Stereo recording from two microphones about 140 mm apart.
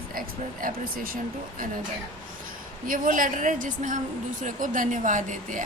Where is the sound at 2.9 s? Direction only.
75° right (ahead or behind).